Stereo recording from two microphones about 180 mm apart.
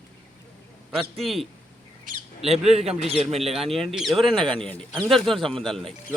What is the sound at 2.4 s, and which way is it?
A man's voice, 35° right (ahead or behind).